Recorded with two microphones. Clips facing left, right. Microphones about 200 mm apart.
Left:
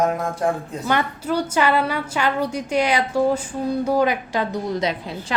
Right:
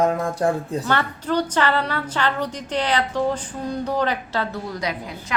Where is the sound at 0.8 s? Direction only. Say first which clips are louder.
Left 1 dB; 15° left (ahead or behind).